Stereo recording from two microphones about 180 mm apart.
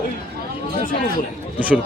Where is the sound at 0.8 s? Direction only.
50° left (ahead or behind).